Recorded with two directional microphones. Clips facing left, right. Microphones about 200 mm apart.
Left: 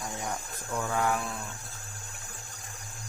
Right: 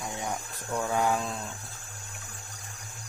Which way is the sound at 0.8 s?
20° right (ahead or behind).